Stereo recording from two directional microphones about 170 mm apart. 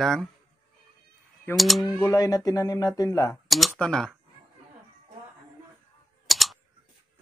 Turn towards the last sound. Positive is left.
turn(degrees=0)  # may be behind; listen again after turning